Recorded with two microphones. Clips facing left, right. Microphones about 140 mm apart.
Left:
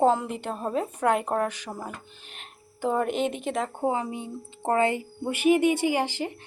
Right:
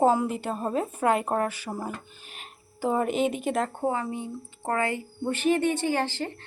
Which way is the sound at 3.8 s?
15° left (ahead or behind).